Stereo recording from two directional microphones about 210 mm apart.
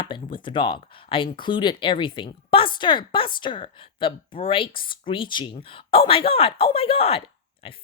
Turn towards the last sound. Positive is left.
turn(degrees=30)  # may be behind; listen again after turning